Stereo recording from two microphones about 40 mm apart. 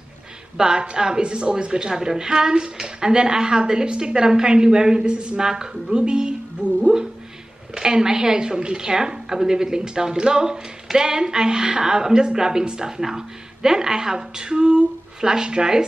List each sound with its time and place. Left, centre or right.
0.6 s a woman's voice: centre
5.5 s a woman's voice: centre